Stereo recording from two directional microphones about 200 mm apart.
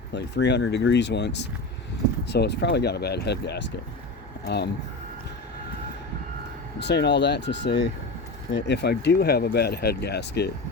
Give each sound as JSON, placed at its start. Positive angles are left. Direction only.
{"t": 0.1, "sound": "speech", "side_deg": 60}
{"t": 6.7, "sound": "speech", "side_deg": 55}